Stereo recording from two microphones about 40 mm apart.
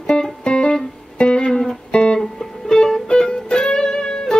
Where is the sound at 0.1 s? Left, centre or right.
Centre.